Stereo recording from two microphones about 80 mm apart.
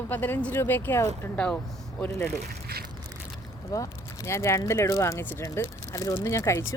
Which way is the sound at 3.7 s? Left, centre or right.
Left.